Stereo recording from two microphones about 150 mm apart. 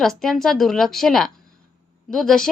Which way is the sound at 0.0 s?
5° left (ahead or behind).